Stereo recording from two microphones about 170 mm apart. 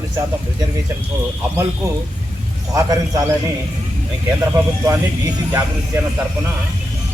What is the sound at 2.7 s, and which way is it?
Speech, 20° right (ahead or behind).